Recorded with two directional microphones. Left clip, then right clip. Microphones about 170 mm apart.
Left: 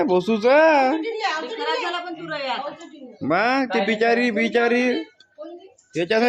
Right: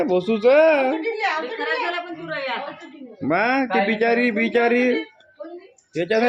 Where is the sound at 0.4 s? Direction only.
30° left (ahead or behind).